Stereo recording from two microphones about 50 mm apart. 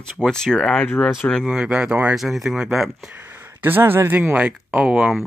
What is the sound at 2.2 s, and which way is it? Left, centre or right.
Speech, centre.